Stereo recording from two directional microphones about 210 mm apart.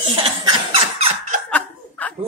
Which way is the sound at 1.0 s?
30° right (ahead or behind).